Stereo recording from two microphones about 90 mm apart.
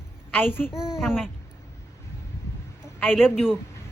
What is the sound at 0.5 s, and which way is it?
Speech, 25° left (ahead or behind).